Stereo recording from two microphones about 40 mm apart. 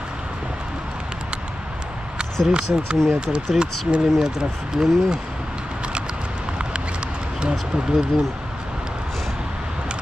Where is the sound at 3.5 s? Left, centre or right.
Centre.